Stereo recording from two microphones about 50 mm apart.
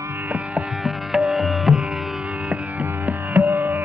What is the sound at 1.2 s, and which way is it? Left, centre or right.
Music, right.